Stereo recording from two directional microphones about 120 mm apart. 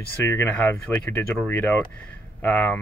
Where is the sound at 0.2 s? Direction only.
15° left (ahead or behind).